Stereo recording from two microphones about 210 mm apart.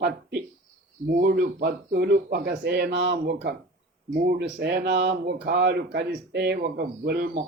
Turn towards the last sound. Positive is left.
turn(degrees=-50)  # may be behind; listen again after turning